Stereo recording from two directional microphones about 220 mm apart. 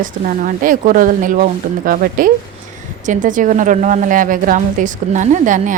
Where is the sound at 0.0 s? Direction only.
40° right (ahead or behind).